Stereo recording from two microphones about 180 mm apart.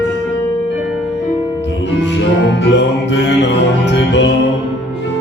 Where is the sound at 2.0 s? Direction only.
90° left.